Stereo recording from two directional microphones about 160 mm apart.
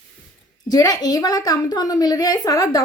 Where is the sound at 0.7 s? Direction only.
25° left (ahead or behind).